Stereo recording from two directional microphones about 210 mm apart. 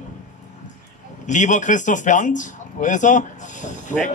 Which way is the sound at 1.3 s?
35° left (ahead or behind).